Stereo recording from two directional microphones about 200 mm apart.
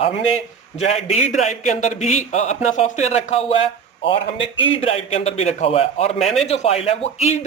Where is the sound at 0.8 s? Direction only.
30° left (ahead or behind).